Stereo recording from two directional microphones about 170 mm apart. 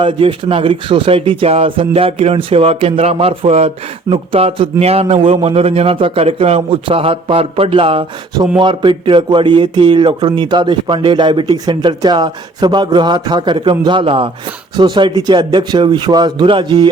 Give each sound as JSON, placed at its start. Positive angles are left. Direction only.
{"t": 0.0, "sound": "a man's voice", "side_deg": -30}